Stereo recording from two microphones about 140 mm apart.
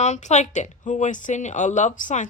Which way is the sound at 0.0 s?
55° left (ahead or behind).